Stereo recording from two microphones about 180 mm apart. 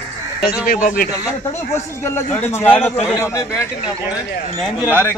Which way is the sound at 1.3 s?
15° left (ahead or behind).